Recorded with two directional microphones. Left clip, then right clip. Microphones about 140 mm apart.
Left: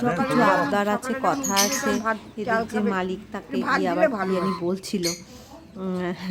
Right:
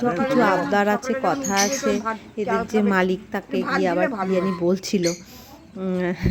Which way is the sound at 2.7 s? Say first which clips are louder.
Right 5 dB; 25° right (ahead or behind).